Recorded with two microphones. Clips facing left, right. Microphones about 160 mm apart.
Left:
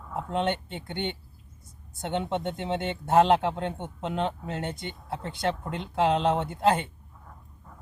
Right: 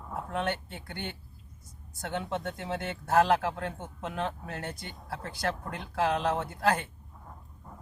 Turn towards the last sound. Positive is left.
turn(degrees=25)  # may be behind; listen again after turning